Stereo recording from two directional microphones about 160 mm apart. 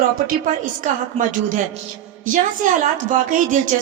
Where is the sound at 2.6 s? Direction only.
55° right (ahead or behind).